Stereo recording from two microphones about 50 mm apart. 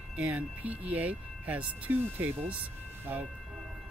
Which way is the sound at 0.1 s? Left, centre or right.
Right.